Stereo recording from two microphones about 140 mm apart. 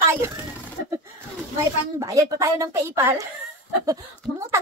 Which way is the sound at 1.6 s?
20° right (ahead or behind).